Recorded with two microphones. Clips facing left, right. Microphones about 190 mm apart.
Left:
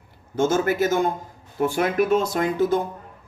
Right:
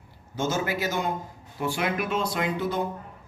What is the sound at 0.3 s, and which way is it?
Speech, 50° left (ahead or behind).